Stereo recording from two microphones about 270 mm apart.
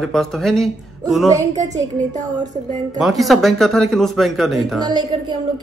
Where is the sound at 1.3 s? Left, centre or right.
Centre.